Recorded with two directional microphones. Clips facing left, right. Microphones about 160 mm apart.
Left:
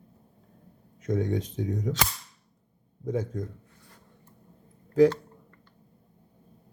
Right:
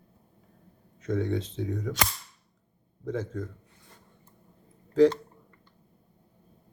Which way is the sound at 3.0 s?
15° left (ahead or behind).